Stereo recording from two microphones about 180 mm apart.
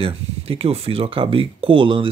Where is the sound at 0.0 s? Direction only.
30° right (ahead or behind).